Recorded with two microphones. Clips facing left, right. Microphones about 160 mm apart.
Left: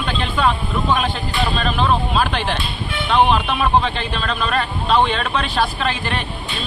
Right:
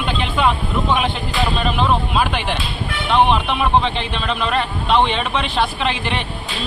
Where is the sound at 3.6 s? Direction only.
20° right (ahead or behind).